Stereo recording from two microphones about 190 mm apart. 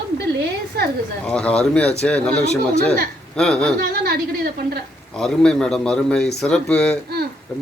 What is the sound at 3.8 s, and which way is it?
Speech, 50° right (ahead or behind).